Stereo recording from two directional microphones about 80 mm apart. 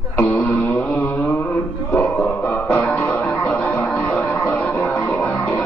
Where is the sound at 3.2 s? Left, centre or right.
Centre.